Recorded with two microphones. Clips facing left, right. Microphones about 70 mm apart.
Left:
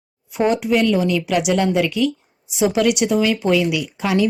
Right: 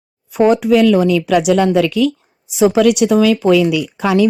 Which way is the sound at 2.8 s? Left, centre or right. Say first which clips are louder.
Right 5 dB; right.